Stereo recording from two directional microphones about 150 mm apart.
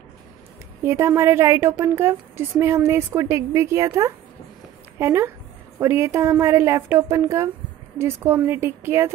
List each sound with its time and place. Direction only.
0.8 s a woman's voice: 15° right (ahead or behind)